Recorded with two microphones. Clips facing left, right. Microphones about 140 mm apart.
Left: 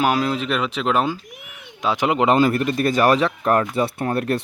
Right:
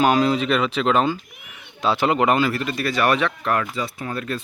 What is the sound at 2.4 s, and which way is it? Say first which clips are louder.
Speech: left 5 dB; 50° left (ahead or behind).